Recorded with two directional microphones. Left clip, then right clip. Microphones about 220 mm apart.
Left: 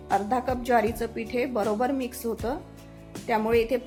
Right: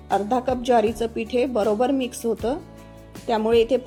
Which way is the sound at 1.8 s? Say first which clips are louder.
Right 5 dB; 20° right (ahead or behind).